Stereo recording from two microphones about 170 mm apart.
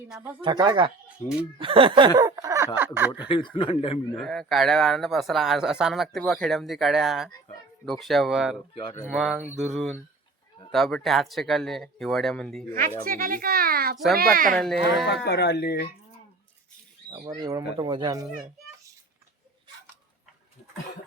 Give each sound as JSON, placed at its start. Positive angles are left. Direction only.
{"t": 0.2, "sound": "speech", "side_deg": -10}
{"t": 0.4, "sound": "speech", "side_deg": -25}
{"t": 1.2, "sound": "speech", "side_deg": 45}
{"t": 1.5, "sound": "speech", "side_deg": -30}
{"t": 3.2, "sound": "speech", "side_deg": 30}
{"t": 4.2, "sound": "speech", "side_deg": 0}
{"t": 8.7, "sound": "speech", "side_deg": 30}
{"t": 9.0, "sound": "speech", "side_deg": -5}
{"t": 13.1, "sound": "speech", "side_deg": -55}
{"t": 14.5, "sound": "speech", "side_deg": 0}
{"t": 15.0, "sound": "speech", "side_deg": 75}
{"t": 17.1, "sound": "speech", "side_deg": -20}